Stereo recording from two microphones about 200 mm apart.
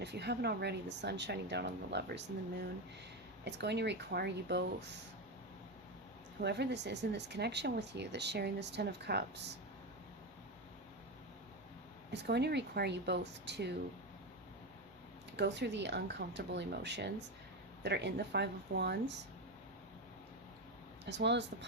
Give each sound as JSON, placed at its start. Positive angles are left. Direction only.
{"t": 0.0, "sound": "speech", "side_deg": -55}
{"t": 3.4, "sound": "speech", "side_deg": -60}
{"t": 6.4, "sound": "speech", "side_deg": -55}
{"t": 12.1, "sound": "speech", "side_deg": -55}
{"t": 15.4, "sound": "speech", "side_deg": -60}
{"t": 21.1, "sound": "speech", "side_deg": -60}